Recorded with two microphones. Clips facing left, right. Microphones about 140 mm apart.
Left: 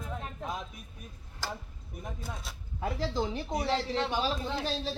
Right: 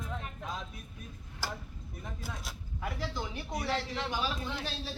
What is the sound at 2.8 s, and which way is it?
A man's voice, 30° left (ahead or behind).